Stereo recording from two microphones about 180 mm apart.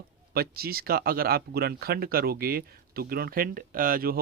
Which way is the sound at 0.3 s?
60° right (ahead or behind).